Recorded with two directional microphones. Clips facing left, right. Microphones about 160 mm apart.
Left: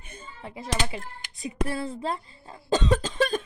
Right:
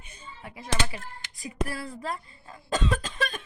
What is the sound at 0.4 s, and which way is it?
Speech, 25° left (ahead or behind).